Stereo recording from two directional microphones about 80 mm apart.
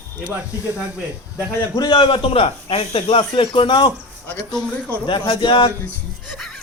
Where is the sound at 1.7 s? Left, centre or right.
Left.